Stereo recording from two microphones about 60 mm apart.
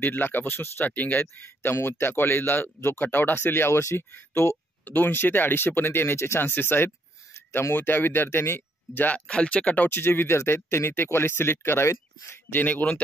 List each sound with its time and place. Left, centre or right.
0.0 s speech: left
4.8 s speech: left
9.3 s speech: centre
9.8 s speech: left
12.5 s speech: left